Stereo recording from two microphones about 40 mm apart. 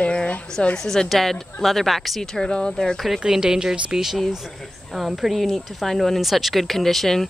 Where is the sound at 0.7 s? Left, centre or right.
Centre.